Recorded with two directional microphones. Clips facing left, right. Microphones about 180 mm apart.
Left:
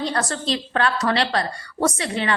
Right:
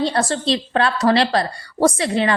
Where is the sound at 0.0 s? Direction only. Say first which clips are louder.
Right 5 dB; 30° right (ahead or behind).